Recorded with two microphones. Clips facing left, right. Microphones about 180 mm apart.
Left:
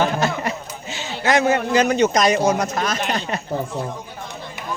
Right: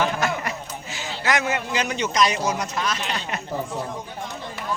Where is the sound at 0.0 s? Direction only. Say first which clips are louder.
Left 3 dB; 25° left (ahead or behind).